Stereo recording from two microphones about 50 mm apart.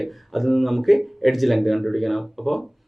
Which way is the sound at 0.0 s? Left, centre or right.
Centre.